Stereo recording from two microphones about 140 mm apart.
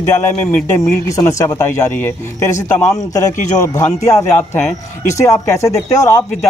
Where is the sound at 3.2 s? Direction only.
60° left (ahead or behind).